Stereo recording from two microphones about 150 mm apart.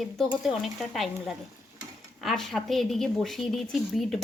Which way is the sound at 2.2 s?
Centre (ahead or behind).